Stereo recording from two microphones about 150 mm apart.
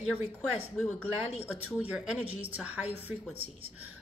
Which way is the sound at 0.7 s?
5° left (ahead or behind).